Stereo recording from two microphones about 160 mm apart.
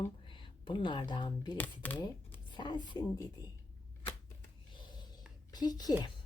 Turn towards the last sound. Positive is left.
turn(degrees=25)  # may be behind; listen again after turning